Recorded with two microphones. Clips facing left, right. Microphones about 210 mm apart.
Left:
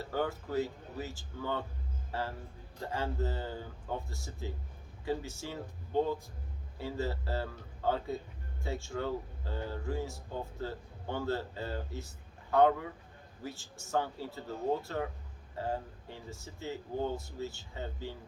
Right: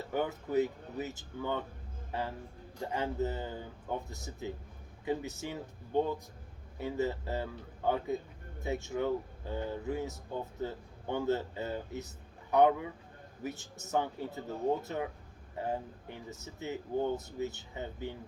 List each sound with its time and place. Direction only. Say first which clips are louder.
0.1 s speech: right 2 dB; 20° right (ahead or behind)